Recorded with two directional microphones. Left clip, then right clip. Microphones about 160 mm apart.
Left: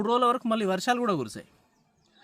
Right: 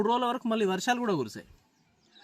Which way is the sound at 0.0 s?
30° left (ahead or behind).